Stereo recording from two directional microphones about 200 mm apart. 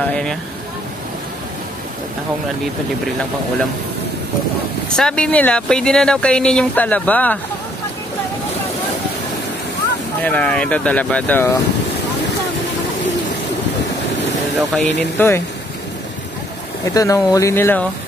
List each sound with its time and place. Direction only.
0.0 s vehicle: 5° left (ahead or behind)
4.8 s speech: 5° left (ahead or behind)
10.2 s speech: 5° left (ahead or behind)
14.7 s speech: 10° left (ahead or behind)
16.9 s speech: 15° left (ahead or behind)